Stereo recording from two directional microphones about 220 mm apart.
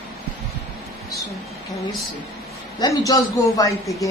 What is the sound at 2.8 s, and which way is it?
Speech, 15° left (ahead or behind).